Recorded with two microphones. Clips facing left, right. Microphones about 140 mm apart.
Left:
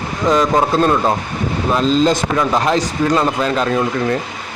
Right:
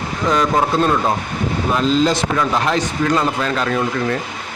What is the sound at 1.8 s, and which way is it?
A man's voice, 45° left (ahead or behind).